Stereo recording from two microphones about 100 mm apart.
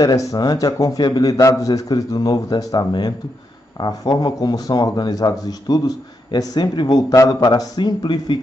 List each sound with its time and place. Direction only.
0.0 s a man's voice: 35° left (ahead or behind)
7.0 s a man's voice: 35° left (ahead or behind)